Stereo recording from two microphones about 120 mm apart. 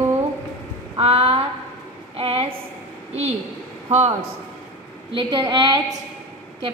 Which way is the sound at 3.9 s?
70° right (ahead or behind).